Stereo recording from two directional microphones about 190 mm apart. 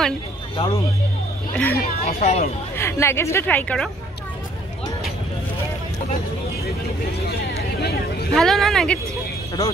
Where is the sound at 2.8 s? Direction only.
15° left (ahead or behind).